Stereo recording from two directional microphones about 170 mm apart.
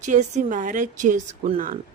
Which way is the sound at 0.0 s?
45° right (ahead or behind).